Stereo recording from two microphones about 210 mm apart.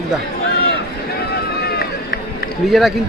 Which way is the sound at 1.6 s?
50° left (ahead or behind).